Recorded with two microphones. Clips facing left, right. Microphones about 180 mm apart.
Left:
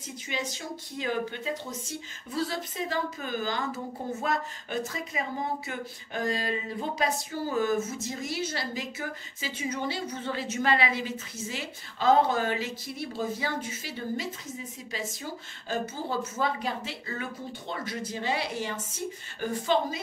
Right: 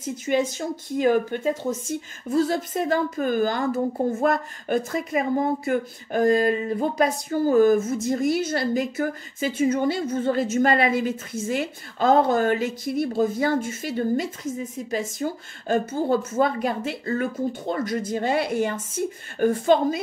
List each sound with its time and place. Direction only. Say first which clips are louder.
0.0 s speech: right 12 dB; 50° right (ahead or behind)